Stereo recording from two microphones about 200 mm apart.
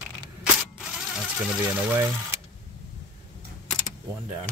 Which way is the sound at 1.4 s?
10° right (ahead or behind).